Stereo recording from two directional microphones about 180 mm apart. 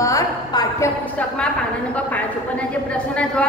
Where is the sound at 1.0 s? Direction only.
10° left (ahead or behind).